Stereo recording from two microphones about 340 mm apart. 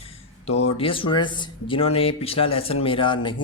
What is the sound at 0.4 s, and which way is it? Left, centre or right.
Speech, centre.